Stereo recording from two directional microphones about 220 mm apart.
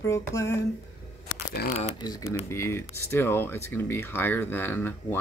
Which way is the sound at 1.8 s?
20° left (ahead or behind).